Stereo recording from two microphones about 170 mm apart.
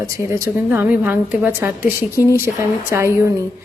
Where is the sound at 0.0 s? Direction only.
15° right (ahead or behind).